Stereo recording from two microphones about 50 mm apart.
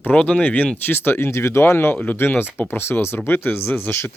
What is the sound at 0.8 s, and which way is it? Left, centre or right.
Speech, left.